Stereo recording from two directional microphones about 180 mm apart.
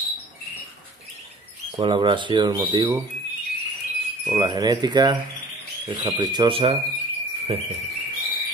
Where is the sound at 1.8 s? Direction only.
25° right (ahead or behind).